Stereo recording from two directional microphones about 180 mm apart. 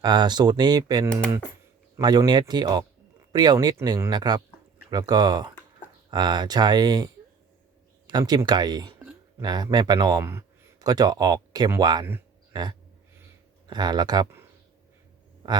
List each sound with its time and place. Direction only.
0.0 s speech: 25° right (ahead or behind)
13.7 s speech: 25° right (ahead or behind)
15.4 s speech: 25° right (ahead or behind)